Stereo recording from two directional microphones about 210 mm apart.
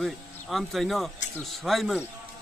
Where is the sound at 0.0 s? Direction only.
Centre (ahead or behind).